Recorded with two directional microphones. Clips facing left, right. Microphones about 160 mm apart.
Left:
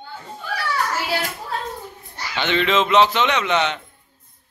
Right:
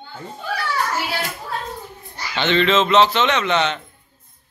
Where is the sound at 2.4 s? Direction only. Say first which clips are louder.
Right 2 dB; 10° left (ahead or behind).